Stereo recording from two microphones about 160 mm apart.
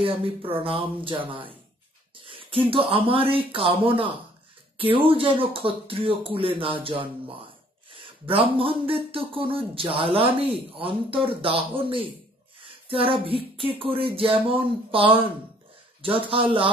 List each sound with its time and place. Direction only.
0.0 s speech: 35° right (ahead or behind)
12.5 s a sound: 35° right (ahead or behind)
13.1 s speech: 35° right (ahead or behind)